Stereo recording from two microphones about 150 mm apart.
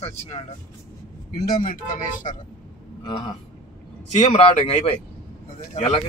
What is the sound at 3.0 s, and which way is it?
Speech, 30° left (ahead or behind).